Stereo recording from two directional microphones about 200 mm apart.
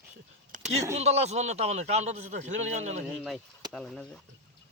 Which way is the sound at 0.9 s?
30° right (ahead or behind).